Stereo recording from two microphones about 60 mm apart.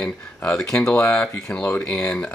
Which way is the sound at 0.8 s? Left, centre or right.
Left.